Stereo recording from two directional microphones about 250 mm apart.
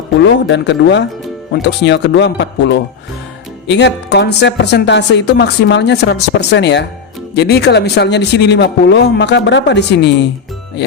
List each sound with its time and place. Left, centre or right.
0.3 s a woman's voice: left